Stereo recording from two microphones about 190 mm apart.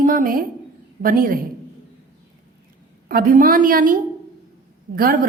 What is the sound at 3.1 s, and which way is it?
A woman's voice, 45° right (ahead or behind).